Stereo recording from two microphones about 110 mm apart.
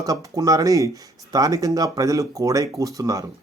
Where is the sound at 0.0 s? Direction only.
35° right (ahead or behind).